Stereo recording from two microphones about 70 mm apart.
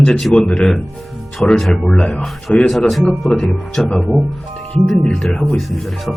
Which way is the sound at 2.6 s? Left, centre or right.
Centre.